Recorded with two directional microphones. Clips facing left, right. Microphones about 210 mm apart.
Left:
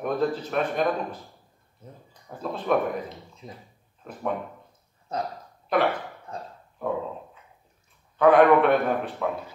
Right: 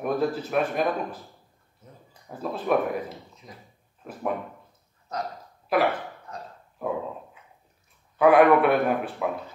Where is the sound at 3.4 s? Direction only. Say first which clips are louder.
Left 8 dB; 30° left (ahead or behind).